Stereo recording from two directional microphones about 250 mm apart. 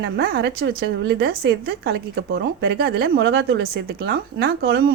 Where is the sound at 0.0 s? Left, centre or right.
Right.